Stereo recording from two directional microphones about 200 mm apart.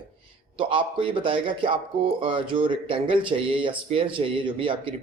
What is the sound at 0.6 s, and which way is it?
Speech, 25° right (ahead or behind).